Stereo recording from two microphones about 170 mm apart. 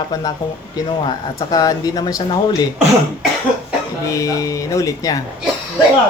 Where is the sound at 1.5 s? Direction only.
20° left (ahead or behind).